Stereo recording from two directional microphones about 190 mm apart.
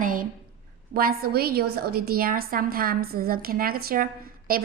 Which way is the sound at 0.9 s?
50° right (ahead or behind).